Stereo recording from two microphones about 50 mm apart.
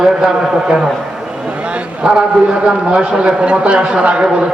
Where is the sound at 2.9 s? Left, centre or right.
Centre.